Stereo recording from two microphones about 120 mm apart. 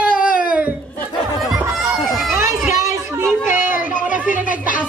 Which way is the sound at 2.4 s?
90° left.